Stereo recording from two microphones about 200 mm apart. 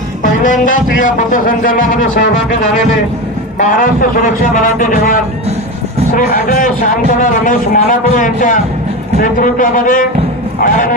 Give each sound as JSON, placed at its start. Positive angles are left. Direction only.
{"t": 0.2, "sound": "speech", "side_deg": 40}
{"t": 3.6, "sound": "speech", "side_deg": 40}